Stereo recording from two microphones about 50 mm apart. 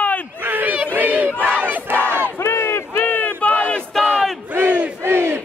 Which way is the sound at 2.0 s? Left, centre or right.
Left.